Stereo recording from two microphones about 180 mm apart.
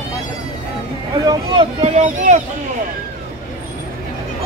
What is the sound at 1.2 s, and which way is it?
Speech, 30° right (ahead or behind).